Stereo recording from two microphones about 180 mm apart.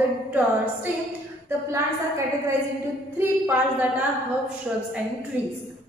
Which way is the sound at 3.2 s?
10° right (ahead or behind).